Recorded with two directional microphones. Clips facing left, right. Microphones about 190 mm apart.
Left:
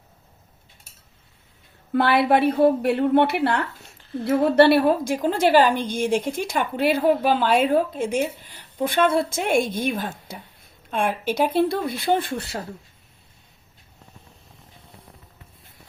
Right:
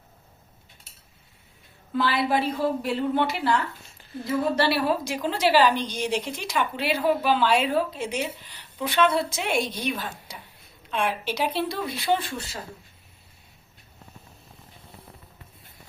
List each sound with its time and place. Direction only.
1.9 s a woman's voice: 60° left (ahead or behind)